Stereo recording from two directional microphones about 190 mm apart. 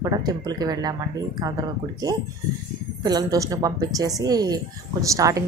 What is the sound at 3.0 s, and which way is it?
A woman's voice, 20° right (ahead or behind).